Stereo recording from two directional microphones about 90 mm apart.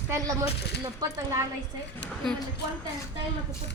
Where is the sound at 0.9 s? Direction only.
40° right (ahead or behind).